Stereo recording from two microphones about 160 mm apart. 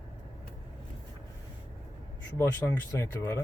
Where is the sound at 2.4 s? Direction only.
15° left (ahead or behind).